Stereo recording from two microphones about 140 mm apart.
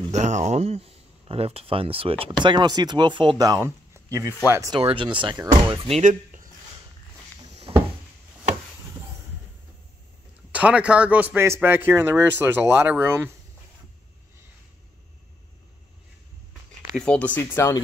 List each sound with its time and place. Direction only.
0.1 s speech: 55° right (ahead or behind); by 4.7 s 20° right (ahead or behind)
4.7 s speech: 40° right (ahead or behind)
5.5 s speech: 45° right (ahead or behind)
6.0 s a sound: 65° right (ahead or behind)
7.7 s a sound: 40° right (ahead or behind)
10.5 s a man's voice: 10° right (ahead or behind)
16.9 s speech: 5° left (ahead or behind)